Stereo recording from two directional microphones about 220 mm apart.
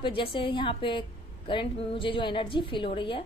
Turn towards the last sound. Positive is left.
turn(degrees=25)  # may be behind; listen again after turning